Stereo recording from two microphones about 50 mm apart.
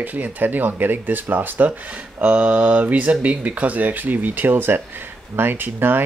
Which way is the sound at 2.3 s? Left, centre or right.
Right.